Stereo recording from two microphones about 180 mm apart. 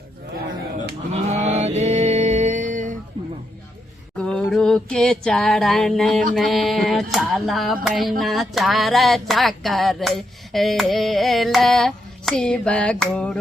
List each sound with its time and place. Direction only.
1.1 s mantra: 35° right (ahead or behind)
4.2 s a sound: 5° left (ahead or behind)
6.3 s speech: centre (ahead or behind)